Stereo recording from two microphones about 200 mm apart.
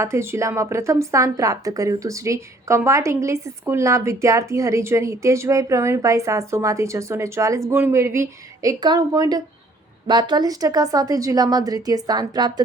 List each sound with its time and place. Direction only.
0.0 s a woman's voice: 15° right (ahead or behind)